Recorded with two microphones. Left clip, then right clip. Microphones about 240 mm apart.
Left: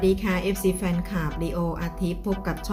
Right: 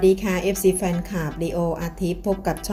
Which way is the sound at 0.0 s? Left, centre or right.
Centre.